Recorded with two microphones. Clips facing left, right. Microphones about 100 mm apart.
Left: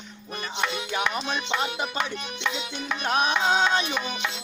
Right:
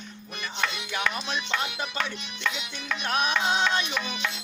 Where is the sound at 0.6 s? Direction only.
20° left (ahead or behind).